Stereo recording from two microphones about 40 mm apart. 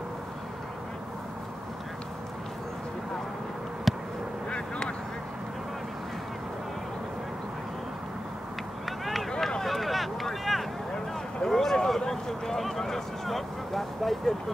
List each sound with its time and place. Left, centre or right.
3.9 s duck: centre
4.5 s quack: left
8.8 s run: centre
9.6 s a sound: centre
11.4 s a sound: centre
12.0 s speech: centre